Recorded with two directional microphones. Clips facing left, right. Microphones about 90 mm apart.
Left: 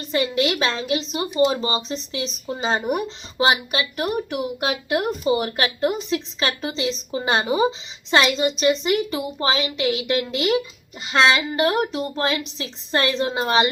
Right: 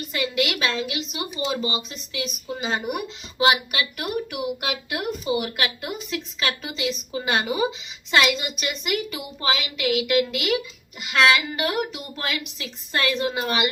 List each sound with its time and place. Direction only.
0.0 s a woman's voice: 30° left (ahead or behind)